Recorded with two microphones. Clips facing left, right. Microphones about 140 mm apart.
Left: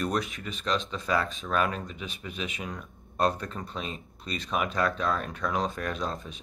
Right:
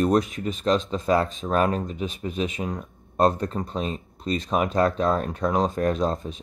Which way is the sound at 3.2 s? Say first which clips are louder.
Right 6 dB; 40° right (ahead or behind).